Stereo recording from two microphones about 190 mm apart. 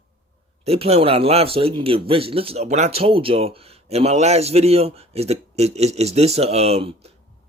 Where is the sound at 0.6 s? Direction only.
30° right (ahead or behind).